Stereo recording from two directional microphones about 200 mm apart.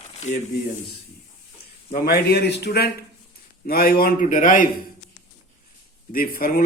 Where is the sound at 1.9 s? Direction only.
50° left (ahead or behind).